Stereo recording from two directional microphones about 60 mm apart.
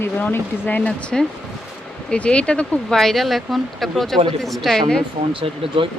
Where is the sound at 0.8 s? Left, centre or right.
Centre.